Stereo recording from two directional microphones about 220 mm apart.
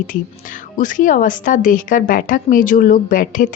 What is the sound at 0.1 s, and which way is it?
A woman's voice, 35° left (ahead or behind).